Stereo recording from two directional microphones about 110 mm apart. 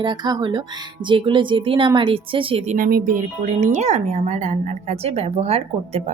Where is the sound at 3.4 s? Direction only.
90° right; by 6.0 s 70° right (ahead or behind).